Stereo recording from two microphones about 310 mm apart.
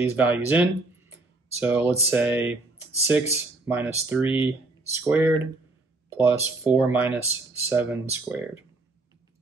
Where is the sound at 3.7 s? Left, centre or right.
Centre.